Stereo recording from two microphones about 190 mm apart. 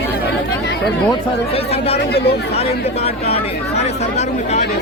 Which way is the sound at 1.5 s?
30° left (ahead or behind).